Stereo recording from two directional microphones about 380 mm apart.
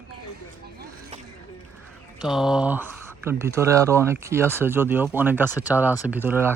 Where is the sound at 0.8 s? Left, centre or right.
Right.